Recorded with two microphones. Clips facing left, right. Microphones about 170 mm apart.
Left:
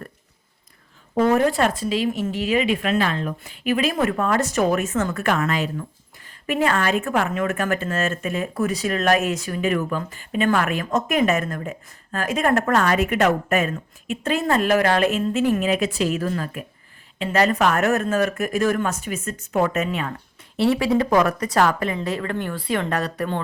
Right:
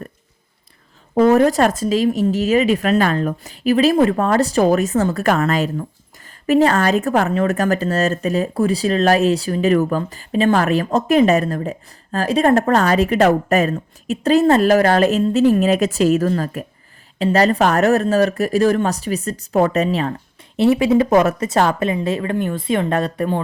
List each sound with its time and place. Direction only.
1.3 s speech: 40° right (ahead or behind)
20.6 s speech: 20° right (ahead or behind)